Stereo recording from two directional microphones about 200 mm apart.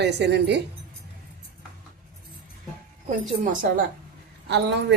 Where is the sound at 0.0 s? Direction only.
55° right (ahead or behind).